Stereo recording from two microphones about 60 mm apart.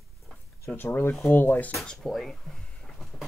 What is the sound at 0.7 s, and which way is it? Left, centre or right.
Speech, left.